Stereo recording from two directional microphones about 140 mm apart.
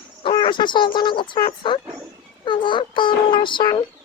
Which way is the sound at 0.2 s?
35° left (ahead or behind).